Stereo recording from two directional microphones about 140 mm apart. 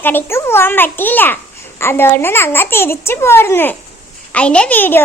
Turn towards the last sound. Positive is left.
turn(degrees=10)  # may be behind; listen again after turning